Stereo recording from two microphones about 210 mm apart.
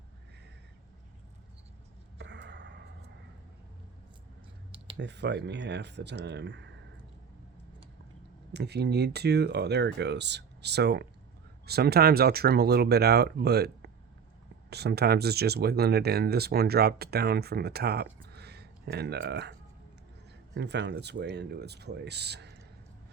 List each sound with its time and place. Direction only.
2.1 s a sound: 55° right (ahead or behind)
4.9 s speech: 55° right (ahead or behind)
8.5 s speech: 50° right (ahead or behind)